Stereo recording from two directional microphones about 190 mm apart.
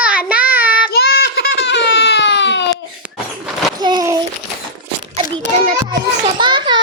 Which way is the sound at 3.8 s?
20° right (ahead or behind).